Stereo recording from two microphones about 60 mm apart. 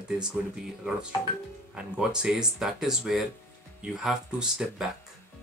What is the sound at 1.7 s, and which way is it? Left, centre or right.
Speech, centre.